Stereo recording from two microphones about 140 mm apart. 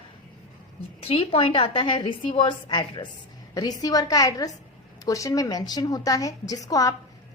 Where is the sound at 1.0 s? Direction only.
40° left (ahead or behind).